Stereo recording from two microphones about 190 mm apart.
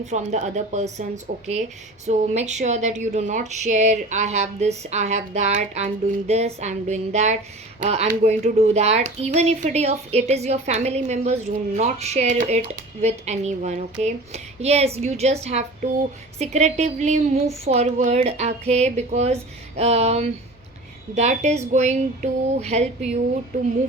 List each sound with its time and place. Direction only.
0.0 s speech: 35° right (ahead or behind)